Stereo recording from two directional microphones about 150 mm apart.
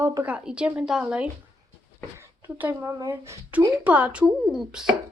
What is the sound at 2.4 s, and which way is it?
A woman's voice, 15° right (ahead or behind).